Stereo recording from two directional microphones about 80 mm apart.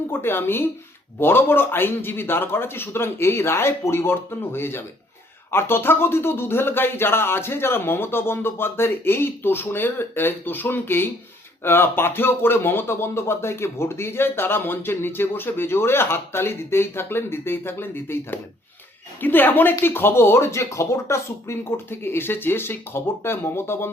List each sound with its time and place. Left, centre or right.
0.1 s speech: left